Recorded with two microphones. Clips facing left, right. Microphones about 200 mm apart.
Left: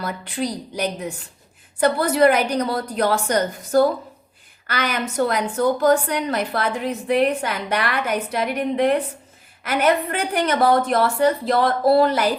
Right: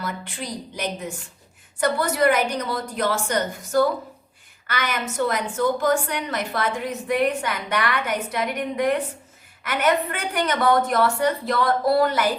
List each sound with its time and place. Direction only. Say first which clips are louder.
0.0 s a woman's voice: left 6 dB; 35° left (ahead or behind)
4.6 s a woman's voice: left 3 dB; 35° left (ahead or behind)